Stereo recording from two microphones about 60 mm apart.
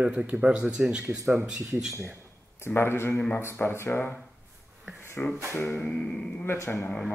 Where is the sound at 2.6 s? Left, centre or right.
Left.